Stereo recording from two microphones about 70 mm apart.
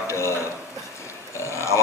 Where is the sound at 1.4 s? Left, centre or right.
Left.